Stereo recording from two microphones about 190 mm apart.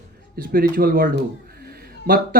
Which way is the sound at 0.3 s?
50° right (ahead or behind).